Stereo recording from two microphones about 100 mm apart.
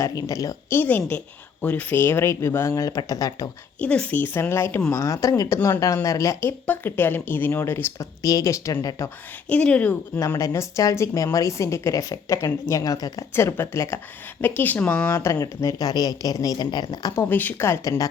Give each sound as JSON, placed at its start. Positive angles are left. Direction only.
{"t": 0.0, "sound": "speech", "side_deg": 35}
{"t": 0.7, "sound": "speech", "side_deg": 20}
{"t": 3.8, "sound": "speech", "side_deg": 10}
{"t": 6.7, "sound": "speech", "side_deg": 20}
{"t": 7.9, "sound": "speech", "side_deg": 35}
{"t": 9.5, "sound": "speech", "side_deg": 10}
{"t": 10.2, "sound": "speech", "side_deg": 35}
{"t": 13.3, "sound": "speech", "side_deg": 25}
{"t": 14.4, "sound": "speech", "side_deg": 20}
{"t": 17.2, "sound": "speech", "side_deg": 20}
{"t": 17.8, "sound": "speech", "side_deg": 40}